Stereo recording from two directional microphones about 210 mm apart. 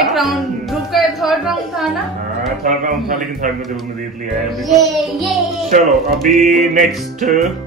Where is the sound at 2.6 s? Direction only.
40° right (ahead or behind).